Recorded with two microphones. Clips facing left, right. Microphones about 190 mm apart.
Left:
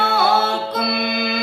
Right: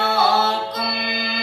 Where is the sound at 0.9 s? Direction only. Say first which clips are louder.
Left 5 dB; 55° left (ahead or behind).